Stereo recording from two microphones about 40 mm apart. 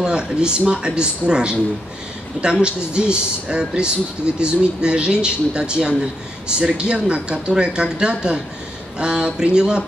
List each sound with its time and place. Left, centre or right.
0.0 s speech: right
2.6 s speech: right